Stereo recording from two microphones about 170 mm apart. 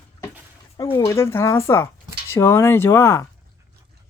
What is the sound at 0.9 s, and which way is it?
Speech, 15° left (ahead or behind).